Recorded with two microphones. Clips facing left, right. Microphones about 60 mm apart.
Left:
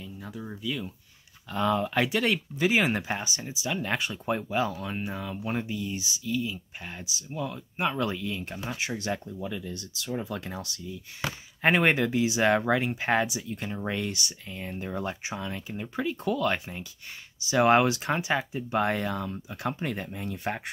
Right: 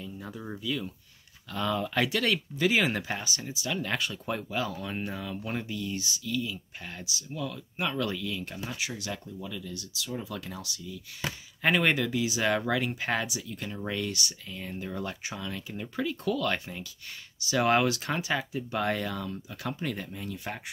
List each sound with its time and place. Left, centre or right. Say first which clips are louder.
0.0 s a sound: even; centre
0.6 s speech: even; centre
1.5 s speech: left 4 dB; centre
4.7 s speech: left 1 dB; centre; by 20.6 s left